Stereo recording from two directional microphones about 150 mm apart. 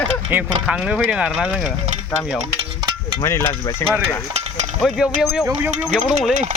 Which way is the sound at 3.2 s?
20° left (ahead or behind).